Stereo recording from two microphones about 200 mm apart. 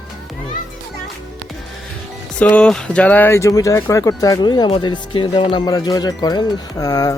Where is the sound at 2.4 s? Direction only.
5° left (ahead or behind).